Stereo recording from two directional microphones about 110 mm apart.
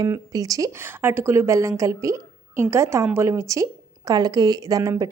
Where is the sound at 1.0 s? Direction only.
20° right (ahead or behind).